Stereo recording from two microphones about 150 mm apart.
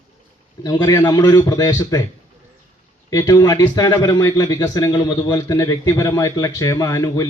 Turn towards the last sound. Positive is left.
turn(degrees=25)  # may be behind; listen again after turning